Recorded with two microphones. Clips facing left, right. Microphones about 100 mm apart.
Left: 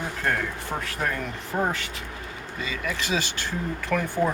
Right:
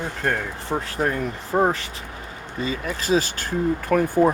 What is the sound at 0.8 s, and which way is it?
Speech, 30° right (ahead or behind).